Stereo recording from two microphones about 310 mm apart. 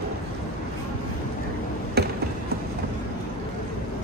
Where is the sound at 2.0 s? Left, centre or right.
Right.